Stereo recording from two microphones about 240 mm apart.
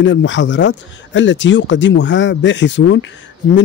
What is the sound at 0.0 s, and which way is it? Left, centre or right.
A man's voice, left.